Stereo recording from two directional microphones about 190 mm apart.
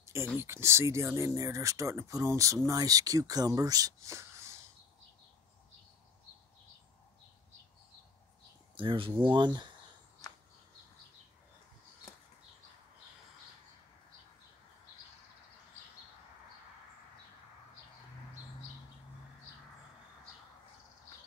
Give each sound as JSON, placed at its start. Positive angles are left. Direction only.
{"t": 0.0, "sound": "a sound", "side_deg": -15}
{"t": 0.4, "sound": "speech", "side_deg": -15}
{"t": 8.7, "sound": "speech", "side_deg": -25}